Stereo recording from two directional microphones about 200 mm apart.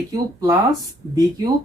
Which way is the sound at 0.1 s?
20° right (ahead or behind).